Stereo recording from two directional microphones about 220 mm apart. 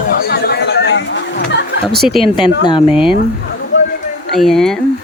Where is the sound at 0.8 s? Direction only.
55° left (ahead or behind).